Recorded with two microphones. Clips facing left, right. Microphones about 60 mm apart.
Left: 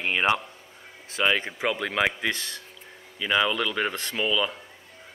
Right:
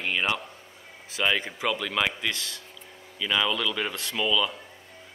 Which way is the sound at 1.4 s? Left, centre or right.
Left.